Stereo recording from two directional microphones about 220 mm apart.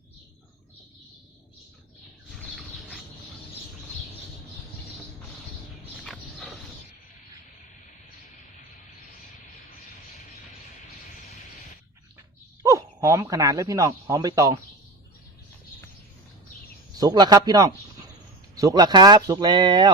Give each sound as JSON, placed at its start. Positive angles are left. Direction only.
{"t": 12.6, "sound": "speech", "side_deg": -15}
{"t": 17.0, "sound": "speech", "side_deg": -20}